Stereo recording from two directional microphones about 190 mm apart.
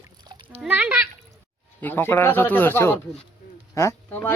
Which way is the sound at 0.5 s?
5° right (ahead or behind).